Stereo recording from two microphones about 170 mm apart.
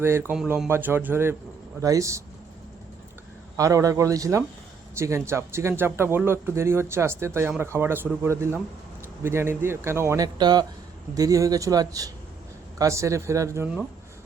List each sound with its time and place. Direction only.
0.0 s a man's voice: 10° right (ahead or behind)
3.6 s a man's voice: 20° right (ahead or behind)